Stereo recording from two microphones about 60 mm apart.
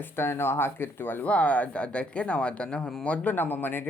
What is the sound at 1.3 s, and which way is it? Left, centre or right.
Speech, left.